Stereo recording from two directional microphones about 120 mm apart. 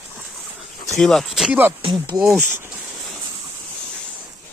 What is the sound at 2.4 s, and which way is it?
Insect, 20° right (ahead or behind).